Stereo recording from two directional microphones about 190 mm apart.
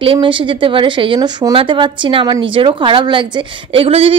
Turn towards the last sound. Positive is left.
turn(degrees=-30)  # may be behind; listen again after turning